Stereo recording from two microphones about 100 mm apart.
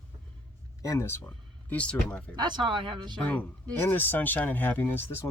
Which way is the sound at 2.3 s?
45° right (ahead or behind).